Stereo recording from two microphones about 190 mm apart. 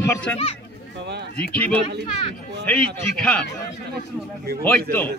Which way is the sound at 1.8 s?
30° left (ahead or behind).